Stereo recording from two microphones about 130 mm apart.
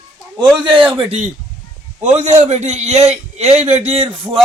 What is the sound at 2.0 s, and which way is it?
A man's voice, 65° right (ahead or behind).